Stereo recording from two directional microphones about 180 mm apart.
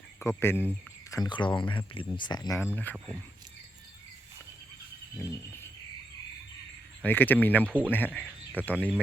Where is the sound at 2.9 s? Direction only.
10° left (ahead or behind).